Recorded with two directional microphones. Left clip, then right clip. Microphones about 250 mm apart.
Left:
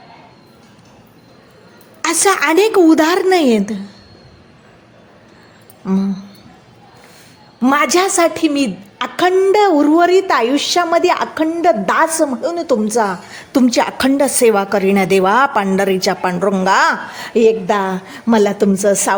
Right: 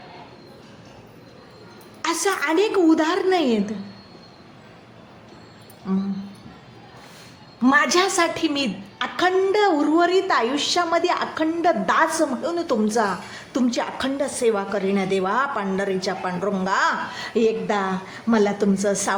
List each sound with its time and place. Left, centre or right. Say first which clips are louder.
2.0 s a woman's voice: left 9 dB; left
5.8 s a sound: left 8 dB; left
7.6 s a woman's voice: left 5 dB; left